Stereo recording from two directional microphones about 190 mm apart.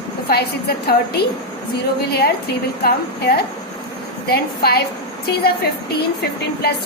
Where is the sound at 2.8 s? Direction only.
55° left (ahead or behind).